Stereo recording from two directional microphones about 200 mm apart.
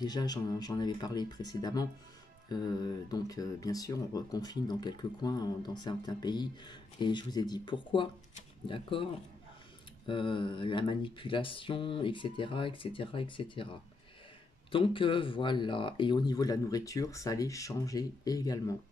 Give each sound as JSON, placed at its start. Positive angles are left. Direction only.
{"t": 0.0, "sound": "speech", "side_deg": 20}